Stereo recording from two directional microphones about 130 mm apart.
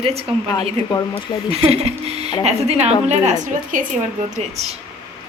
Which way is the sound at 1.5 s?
50° right (ahead or behind).